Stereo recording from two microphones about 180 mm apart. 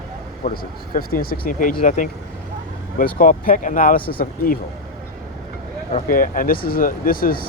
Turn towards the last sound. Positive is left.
turn(degrees=55)  # may be behind; listen again after turning